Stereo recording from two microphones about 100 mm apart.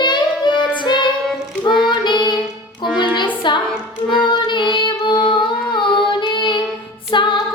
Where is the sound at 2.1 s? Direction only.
50° left (ahead or behind).